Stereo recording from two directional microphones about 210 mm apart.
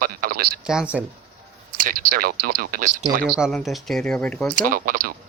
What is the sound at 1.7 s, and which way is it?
Speech, 40° right (ahead or behind).